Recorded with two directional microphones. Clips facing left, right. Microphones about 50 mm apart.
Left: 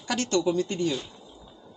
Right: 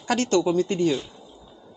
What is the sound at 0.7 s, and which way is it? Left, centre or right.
Speech, right.